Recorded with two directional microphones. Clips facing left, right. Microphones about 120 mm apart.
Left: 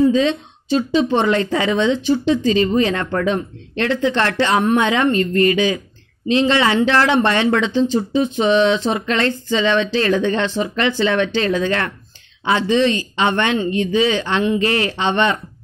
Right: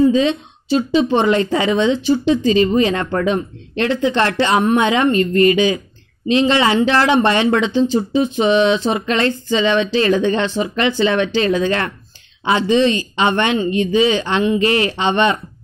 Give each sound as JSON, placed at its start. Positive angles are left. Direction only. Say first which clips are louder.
{"t": 0.1, "sound": "speech", "louder": "right 1 dB", "side_deg": -15}